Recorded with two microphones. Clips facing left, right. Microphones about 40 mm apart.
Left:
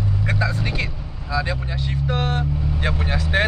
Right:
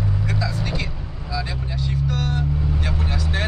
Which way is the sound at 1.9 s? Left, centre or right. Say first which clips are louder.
Left 2 dB; left.